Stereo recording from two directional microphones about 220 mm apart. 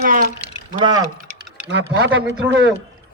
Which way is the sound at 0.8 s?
20° right (ahead or behind).